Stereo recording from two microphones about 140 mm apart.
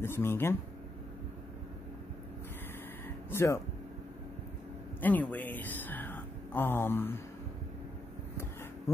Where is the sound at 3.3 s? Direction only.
20° left (ahead or behind).